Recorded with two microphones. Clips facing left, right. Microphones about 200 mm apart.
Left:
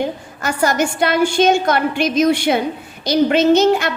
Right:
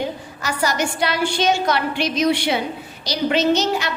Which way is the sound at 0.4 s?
50° left (ahead or behind).